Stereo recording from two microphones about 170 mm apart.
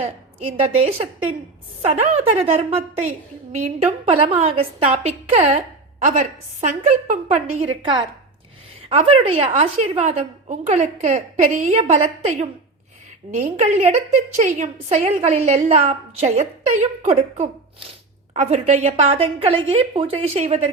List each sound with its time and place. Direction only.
0.0 s a woman's voice: 40° right (ahead or behind)